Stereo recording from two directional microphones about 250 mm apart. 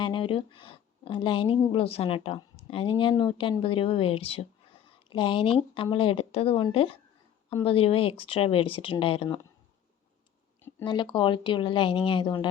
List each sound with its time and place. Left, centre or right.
0.0 s a woman's voice: centre
10.6 s speech: centre